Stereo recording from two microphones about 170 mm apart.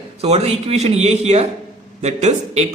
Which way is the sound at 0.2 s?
35° right (ahead or behind).